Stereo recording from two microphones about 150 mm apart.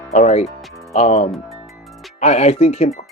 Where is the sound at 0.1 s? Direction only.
50° left (ahead or behind).